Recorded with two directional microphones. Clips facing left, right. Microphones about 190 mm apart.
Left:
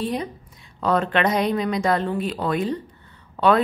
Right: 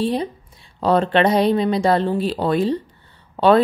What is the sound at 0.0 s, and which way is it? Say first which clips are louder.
A woman's voice: right 5 dB; 30° right (ahead or behind).